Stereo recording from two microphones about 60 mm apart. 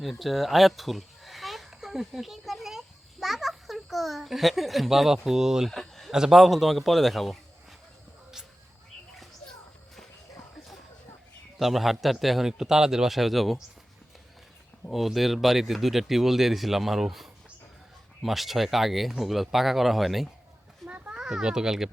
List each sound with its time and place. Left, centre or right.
0.0 s speech: centre
5.7 s a sound: centre
6.1 s speech: centre
11.6 s speech: centre
14.8 s speech: centre
20.8 s children playing: right
21.2 s a child's voice: centre